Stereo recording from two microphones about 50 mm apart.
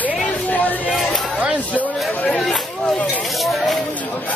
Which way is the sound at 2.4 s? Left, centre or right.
Centre.